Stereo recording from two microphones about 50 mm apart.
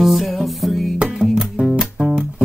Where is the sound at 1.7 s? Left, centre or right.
Centre.